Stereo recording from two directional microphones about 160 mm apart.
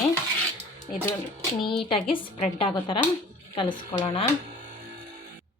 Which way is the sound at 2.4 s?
35° left (ahead or behind).